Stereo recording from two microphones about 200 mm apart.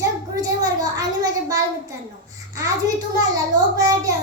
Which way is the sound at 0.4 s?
20° right (ahead or behind).